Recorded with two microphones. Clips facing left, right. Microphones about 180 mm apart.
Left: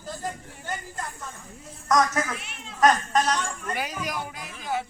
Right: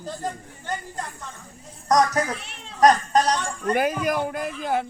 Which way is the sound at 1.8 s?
35° right (ahead or behind).